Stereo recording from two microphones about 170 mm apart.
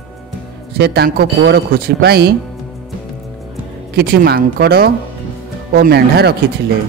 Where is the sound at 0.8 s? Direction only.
75° right (ahead or behind).